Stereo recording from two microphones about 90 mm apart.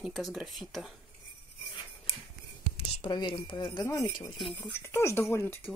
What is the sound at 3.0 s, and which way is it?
Speech, 60° left (ahead or behind).